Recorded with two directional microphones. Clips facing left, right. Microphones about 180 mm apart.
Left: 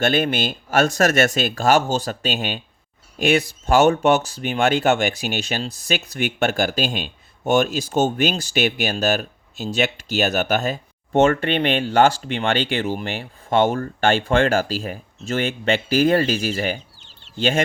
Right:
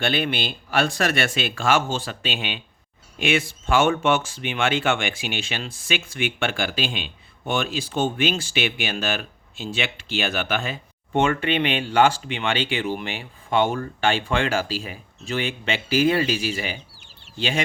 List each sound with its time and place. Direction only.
0.0 s speech: 45° left (ahead or behind)